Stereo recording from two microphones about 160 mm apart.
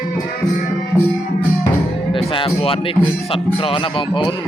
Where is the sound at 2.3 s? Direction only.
35° left (ahead or behind).